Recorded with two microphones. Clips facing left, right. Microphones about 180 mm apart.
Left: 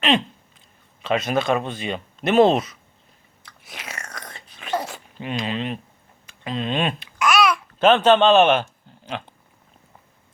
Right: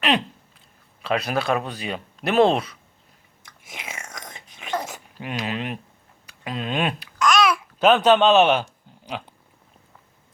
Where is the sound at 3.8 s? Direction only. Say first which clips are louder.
Left 1 dB; 20° right (ahead or behind).